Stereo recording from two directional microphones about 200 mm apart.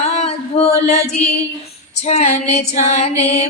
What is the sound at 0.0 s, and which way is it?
Singing, 35° left (ahead or behind).